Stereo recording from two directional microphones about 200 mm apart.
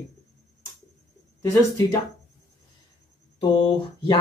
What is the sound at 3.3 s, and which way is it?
Speech, 25° left (ahead or behind).